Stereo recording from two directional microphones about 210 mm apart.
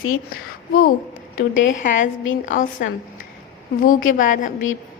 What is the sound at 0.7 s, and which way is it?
Speech, 40° left (ahead or behind).